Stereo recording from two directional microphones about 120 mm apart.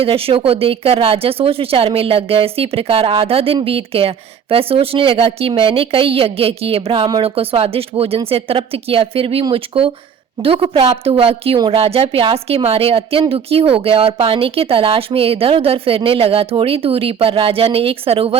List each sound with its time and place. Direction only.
0.0 s speech: 50° right (ahead or behind)
11.5 s speech: 35° right (ahead or behind)
11.8 s speech: 55° right (ahead or behind)